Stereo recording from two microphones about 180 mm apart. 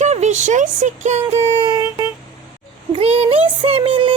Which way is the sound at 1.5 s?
20° right (ahead or behind).